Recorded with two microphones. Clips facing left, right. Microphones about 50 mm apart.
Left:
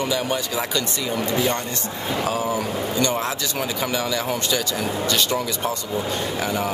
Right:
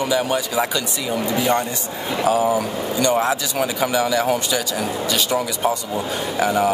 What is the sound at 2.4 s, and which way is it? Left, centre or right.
Speech, centre.